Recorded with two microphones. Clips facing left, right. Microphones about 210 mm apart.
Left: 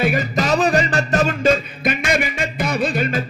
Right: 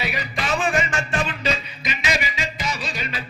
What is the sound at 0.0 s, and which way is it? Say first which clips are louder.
Music: left 9 dB; 45° left (ahead or behind).